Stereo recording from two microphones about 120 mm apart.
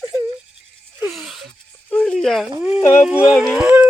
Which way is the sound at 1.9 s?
10° left (ahead or behind).